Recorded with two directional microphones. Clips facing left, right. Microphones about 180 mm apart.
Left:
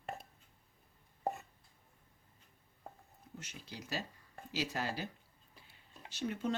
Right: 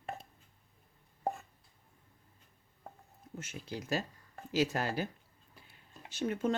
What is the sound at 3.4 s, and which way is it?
Speech, 50° right (ahead or behind).